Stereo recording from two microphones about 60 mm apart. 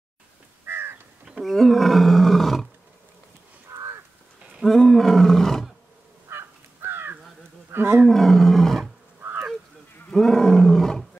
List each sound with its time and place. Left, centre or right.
0.7 s crow: right
1.4 s speech: centre
3.7 s crow: right
4.6 s roar: centre
6.2 s crow: right
7.7 s roaring cats: right
8.0 s roar: centre
9.2 s a sound: right
10.1 s roar: centre